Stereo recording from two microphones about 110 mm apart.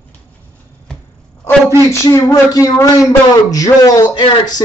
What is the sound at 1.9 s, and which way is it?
A man's voice, 30° left (ahead or behind).